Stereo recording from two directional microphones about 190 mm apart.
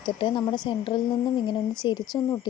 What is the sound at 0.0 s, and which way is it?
Speech, 25° left (ahead or behind).